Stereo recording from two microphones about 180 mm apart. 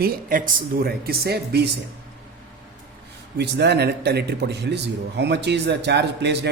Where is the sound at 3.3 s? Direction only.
65° right (ahead or behind).